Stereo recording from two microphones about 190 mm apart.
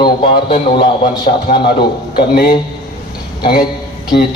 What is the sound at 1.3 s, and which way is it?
A man's voice, 40° left (ahead or behind).